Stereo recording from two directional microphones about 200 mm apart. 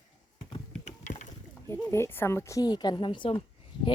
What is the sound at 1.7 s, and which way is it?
A woman's voice, 10° left (ahead or behind).